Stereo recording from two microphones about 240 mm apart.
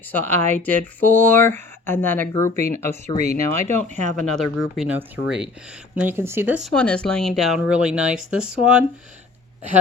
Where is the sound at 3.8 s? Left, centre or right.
Right.